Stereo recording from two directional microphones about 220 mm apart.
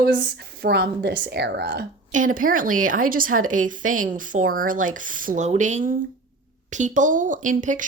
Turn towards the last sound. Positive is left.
turn(degrees=-35)  # may be behind; listen again after turning